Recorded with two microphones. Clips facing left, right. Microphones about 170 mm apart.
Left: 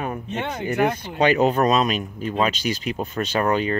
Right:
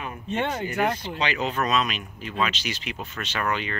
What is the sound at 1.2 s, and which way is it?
Speech, 45° left (ahead or behind).